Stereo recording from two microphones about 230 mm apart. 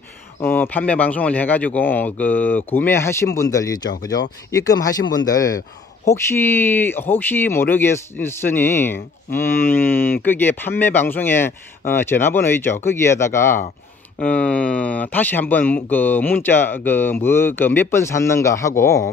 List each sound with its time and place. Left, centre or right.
0.4 s speech: centre